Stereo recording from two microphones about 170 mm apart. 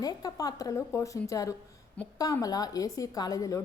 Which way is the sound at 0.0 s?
20° left (ahead or behind).